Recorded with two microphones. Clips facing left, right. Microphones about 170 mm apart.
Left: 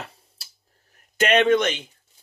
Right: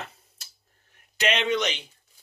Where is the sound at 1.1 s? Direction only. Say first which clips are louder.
Left 7 dB; 50° left (ahead or behind).